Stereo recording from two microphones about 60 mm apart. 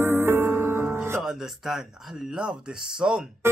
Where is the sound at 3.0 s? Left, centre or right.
Centre.